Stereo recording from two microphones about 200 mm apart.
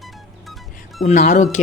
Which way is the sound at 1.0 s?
40° left (ahead or behind).